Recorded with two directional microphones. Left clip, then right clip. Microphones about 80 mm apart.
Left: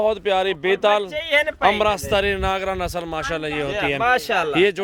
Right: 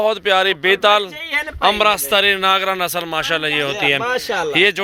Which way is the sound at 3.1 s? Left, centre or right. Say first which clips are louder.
Right 6 dB; centre.